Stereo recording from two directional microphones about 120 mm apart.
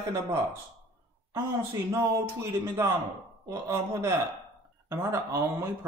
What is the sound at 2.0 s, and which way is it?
Speech, 20° right (ahead or behind).